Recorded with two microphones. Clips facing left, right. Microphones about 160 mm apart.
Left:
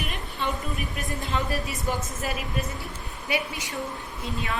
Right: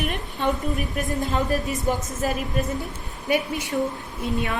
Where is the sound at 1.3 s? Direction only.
40° right (ahead or behind).